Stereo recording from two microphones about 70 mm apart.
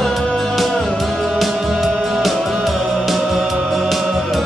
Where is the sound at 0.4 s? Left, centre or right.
Centre.